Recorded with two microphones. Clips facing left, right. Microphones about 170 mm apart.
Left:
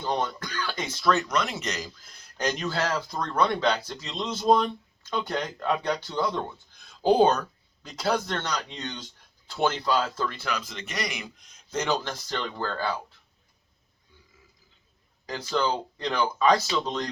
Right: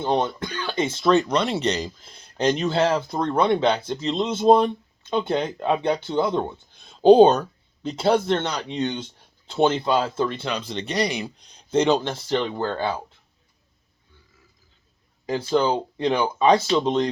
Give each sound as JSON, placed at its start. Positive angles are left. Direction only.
{"t": 0.0, "sound": "speech", "side_deg": -25}
{"t": 15.3, "sound": "speech", "side_deg": -25}